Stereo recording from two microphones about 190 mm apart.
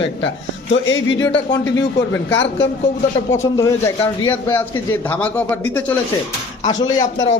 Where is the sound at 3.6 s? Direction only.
15° left (ahead or behind).